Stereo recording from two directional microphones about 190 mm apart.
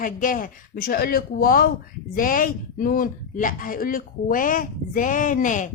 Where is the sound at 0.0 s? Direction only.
45° left (ahead or behind).